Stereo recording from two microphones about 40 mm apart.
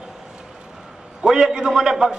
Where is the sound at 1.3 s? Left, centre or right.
Centre.